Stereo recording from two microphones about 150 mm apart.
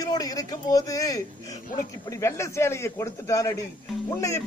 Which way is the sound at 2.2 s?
20° left (ahead or behind).